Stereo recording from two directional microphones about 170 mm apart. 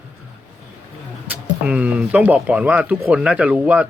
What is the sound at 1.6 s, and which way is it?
Speech, 5° right (ahead or behind).